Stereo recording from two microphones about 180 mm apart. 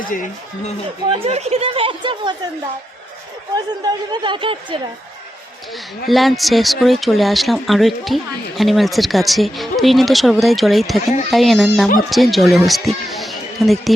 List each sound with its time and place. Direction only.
0.0 s speech: 50° left (ahead or behind)
1.2 s speech: 35° right (ahead or behind)
3.5 s speech: 25° right (ahead or behind)
6.1 s speech: centre (ahead or behind)